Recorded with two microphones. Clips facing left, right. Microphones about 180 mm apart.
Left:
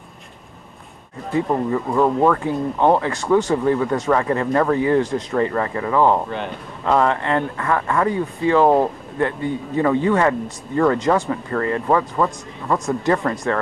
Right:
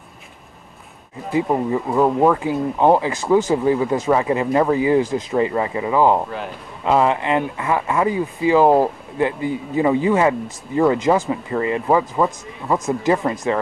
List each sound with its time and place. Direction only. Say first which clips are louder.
1.3 s speech: right 1 dB; 10° right (ahead or behind)
13.1 s speech: right 1 dB; 15° right (ahead or behind)